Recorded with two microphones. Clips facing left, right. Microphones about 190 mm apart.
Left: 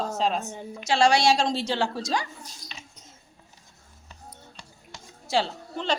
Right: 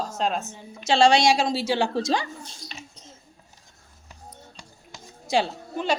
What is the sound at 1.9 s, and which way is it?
Speech, 25° right (ahead or behind).